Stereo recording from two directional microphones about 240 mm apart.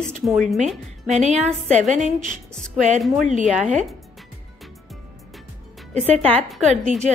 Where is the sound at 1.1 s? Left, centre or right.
Right.